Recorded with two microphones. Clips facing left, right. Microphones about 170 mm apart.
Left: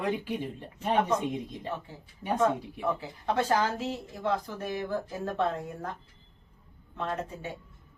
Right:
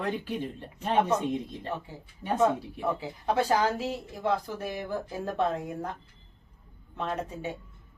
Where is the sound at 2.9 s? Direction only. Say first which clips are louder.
Right 2 dB; 10° right (ahead or behind).